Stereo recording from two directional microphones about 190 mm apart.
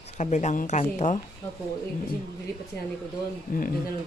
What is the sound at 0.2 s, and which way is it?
Speech, 40° left (ahead or behind).